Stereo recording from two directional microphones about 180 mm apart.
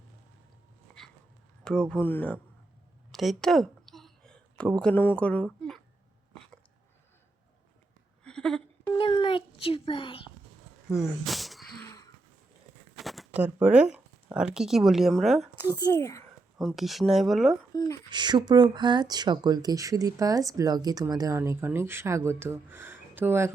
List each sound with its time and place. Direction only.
0.9 s dog: 5° left (ahead or behind)
1.6 s speech: 5° left (ahead or behind)
3.1 s a sound: centre (ahead or behind)
4.8 s speech: 10° left (ahead or behind)
8.2 s a sound: 5° left (ahead or behind)
9.0 s a sound: 25° left (ahead or behind)
10.8 s a sound: centre (ahead or behind)
13.0 s speech: centre (ahead or behind)
15.8 s speech: 15° left (ahead or behind)
16.6 s speech: centre (ahead or behind)
17.7 s speech: 20° left (ahead or behind)
18.1 s speech: 25° right (ahead or behind)